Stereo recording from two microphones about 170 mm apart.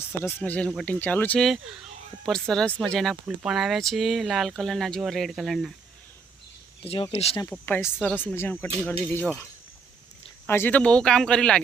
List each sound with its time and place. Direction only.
0.0 s speech: 15° left (ahead or behind)
6.8 s speech: 35° left (ahead or behind)
7.5 s speech: 10° left (ahead or behind)
10.4 s speech: 15° left (ahead or behind)